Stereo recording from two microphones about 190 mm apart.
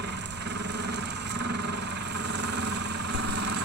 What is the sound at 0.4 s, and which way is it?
Vehicle, 65° right (ahead or behind).